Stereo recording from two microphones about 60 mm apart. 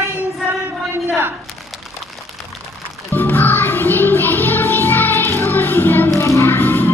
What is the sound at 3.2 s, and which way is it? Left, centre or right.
Music, left.